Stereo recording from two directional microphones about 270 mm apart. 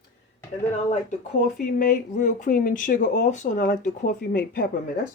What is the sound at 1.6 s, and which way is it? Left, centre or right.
Speech, left.